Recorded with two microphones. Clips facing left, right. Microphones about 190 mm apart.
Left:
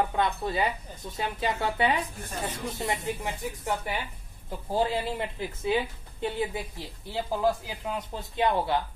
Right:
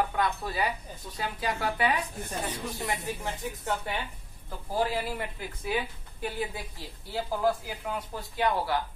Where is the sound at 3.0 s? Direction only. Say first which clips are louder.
Left 2 dB; 15° left (ahead or behind).